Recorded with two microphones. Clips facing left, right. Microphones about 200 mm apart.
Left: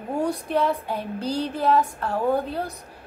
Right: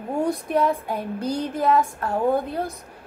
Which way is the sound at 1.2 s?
30° left (ahead or behind).